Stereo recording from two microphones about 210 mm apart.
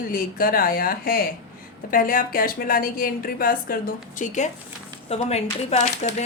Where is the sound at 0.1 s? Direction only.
45° left (ahead or behind).